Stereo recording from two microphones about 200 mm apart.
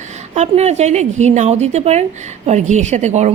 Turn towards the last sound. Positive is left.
turn(degrees=-35)  # may be behind; listen again after turning